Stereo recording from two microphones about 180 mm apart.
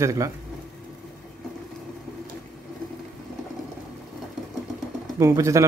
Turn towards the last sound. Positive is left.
turn(degrees=-15)  # may be behind; listen again after turning